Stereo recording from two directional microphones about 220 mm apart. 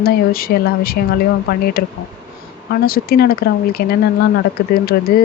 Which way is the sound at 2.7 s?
45° left (ahead or behind).